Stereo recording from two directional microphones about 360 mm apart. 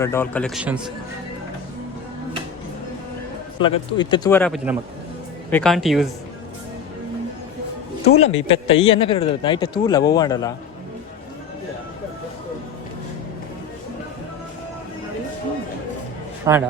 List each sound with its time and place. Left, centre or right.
0.0 s speech: centre
3.6 s speech: centre
8.0 s a man's voice: centre
16.5 s a man's voice: centre